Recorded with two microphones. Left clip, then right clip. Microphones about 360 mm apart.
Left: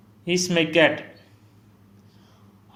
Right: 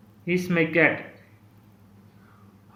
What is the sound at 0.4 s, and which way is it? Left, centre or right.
Speech, centre.